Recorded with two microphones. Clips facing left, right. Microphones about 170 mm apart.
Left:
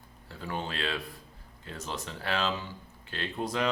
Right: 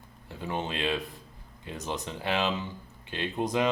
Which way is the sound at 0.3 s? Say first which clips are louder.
Right 3 dB; 20° right (ahead or behind).